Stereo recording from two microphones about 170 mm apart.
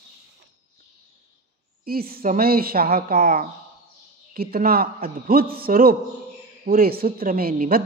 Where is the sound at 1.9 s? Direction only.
60° right (ahead or behind).